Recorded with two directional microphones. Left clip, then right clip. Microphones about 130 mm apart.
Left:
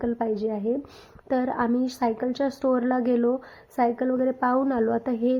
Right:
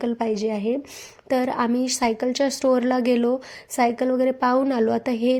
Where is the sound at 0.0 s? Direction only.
25° right (ahead or behind).